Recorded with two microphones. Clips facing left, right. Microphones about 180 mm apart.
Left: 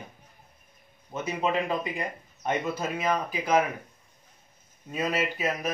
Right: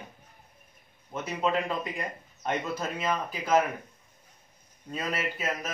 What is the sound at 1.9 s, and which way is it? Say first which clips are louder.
Speech: left 2 dB; 10° left (ahead or behind).